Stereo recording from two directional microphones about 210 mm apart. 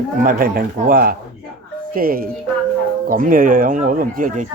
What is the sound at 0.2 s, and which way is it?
A man's voice, 40° right (ahead or behind).